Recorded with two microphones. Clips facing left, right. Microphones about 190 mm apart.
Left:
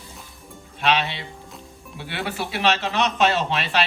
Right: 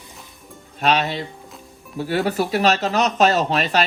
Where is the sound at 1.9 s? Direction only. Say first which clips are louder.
Right 9 dB; 40° right (ahead or behind).